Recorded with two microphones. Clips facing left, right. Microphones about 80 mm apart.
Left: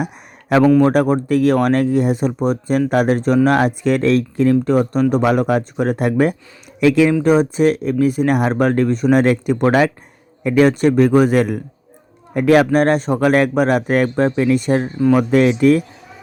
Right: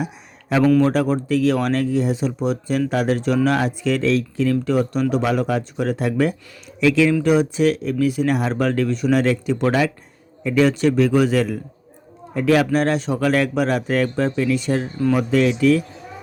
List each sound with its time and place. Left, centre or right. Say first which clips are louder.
0.8 s speech: left 4 dB; left